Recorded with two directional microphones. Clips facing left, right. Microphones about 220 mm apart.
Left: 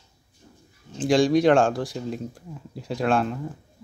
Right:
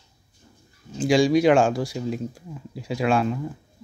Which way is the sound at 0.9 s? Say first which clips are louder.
Right 1 dB; centre (ahead or behind).